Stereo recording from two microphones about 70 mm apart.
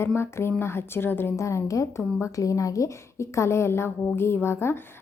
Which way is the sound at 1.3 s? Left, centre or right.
Left.